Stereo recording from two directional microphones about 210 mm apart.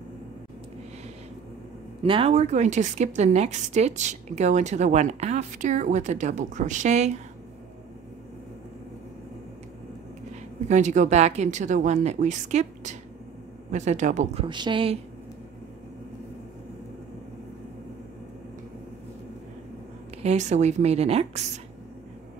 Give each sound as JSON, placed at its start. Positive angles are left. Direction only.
{"t": 2.0, "sound": "a woman's voice", "side_deg": -25}
{"t": 10.7, "sound": "a woman's voice", "side_deg": -35}
{"t": 20.2, "sound": "a woman's voice", "side_deg": -35}